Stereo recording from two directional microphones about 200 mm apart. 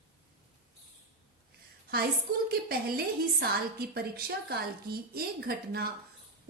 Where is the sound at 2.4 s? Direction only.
50° right (ahead or behind).